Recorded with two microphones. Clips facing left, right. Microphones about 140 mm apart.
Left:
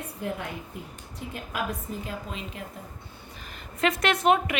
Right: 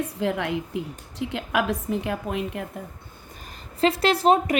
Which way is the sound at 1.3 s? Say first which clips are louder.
Right 7 dB; 75° right (ahead or behind).